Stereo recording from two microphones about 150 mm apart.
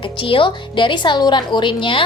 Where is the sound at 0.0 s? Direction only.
35° left (ahead or behind).